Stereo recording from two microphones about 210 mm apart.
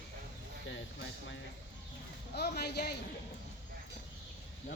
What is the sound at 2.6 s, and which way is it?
Speech, 50° left (ahead or behind).